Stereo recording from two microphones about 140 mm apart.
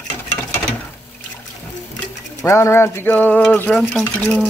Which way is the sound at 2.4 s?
20° left (ahead or behind).